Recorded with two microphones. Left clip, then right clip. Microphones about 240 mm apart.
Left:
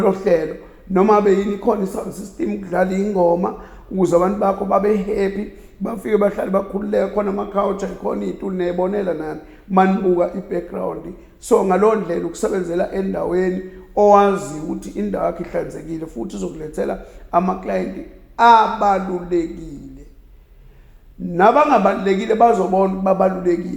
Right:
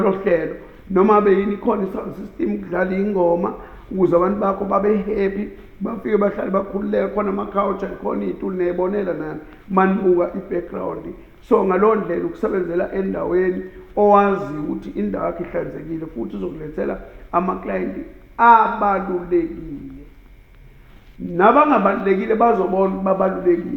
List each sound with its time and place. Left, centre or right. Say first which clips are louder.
0.0 s a man's voice: left 2 dB; left
21.3 s speech: left 1 dB; left